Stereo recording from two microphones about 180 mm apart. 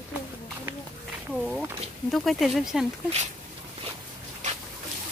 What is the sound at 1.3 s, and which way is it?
Speech, 5° right (ahead or behind).